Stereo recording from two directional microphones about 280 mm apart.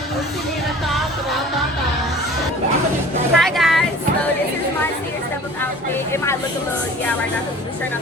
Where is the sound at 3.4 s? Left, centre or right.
Centre.